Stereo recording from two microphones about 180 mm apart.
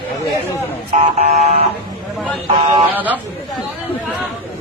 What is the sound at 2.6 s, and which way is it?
Speech, 30° right (ahead or behind).